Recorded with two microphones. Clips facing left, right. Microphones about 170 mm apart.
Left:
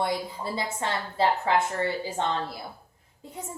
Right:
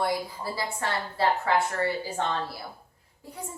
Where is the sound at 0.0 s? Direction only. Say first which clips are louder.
Even; 20° left (ahead or behind).